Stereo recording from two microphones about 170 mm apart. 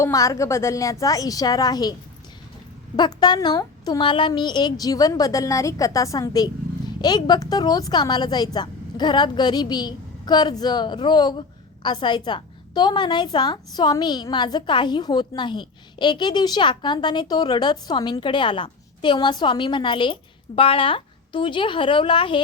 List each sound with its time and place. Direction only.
0.0 s a woman's voice: 20° left (ahead or behind)